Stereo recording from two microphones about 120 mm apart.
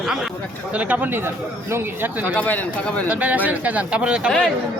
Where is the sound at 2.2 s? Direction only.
15° left (ahead or behind).